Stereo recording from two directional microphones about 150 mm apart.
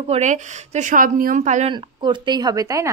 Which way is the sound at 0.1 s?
50° right (ahead or behind).